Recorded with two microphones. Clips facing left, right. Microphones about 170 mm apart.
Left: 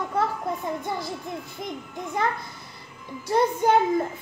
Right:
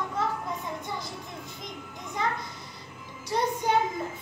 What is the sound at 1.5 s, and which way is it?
A child's voice, 55° left (ahead or behind).